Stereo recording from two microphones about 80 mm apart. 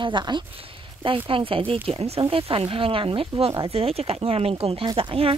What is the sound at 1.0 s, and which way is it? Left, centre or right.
Speech, right.